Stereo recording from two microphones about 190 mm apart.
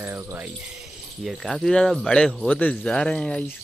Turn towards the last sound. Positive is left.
turn(degrees=5)  # may be behind; listen again after turning